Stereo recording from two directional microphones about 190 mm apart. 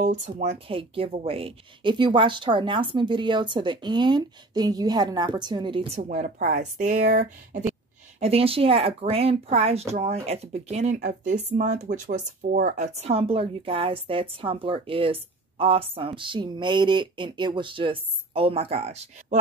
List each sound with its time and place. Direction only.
0.0 s speech: 35° right (ahead or behind)
8.2 s speech: 30° right (ahead or behind)
11.3 s speech: 45° right (ahead or behind)